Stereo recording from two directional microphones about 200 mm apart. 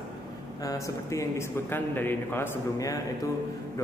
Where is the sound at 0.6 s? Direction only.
15° left (ahead or behind).